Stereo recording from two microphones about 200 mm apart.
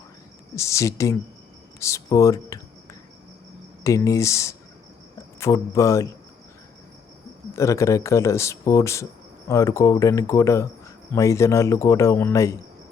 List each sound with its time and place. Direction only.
0.5 s speech: 15° left (ahead or behind)
3.8 s speech: 15° left (ahead or behind)
7.5 s speech: 15° left (ahead or behind)